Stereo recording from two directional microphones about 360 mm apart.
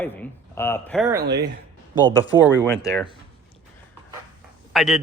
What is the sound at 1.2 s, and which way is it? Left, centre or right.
Speech, right.